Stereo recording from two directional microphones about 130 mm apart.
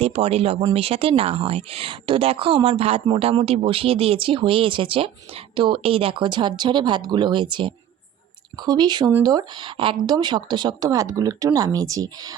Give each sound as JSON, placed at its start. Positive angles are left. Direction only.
{"t": 0.0, "sound": "speech", "side_deg": -50}